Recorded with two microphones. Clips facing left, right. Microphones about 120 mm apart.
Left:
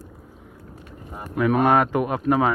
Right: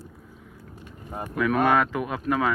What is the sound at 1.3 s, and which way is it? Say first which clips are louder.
Speech: left 3 dB; 30° left (ahead or behind).